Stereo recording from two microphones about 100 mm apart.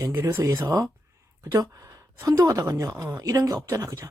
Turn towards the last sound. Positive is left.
turn(degrees=-35)  # may be behind; listen again after turning